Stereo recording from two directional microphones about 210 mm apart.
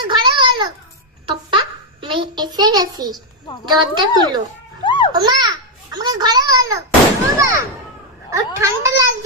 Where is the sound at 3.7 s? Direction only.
20° right (ahead or behind).